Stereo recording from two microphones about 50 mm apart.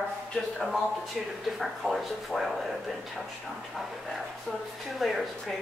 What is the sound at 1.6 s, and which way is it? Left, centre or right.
A woman's voice, centre.